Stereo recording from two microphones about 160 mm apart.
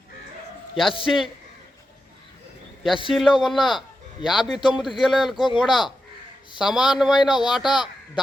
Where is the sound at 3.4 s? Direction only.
Centre (ahead or behind).